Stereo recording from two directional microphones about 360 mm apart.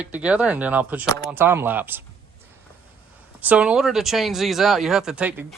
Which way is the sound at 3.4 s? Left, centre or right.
Centre.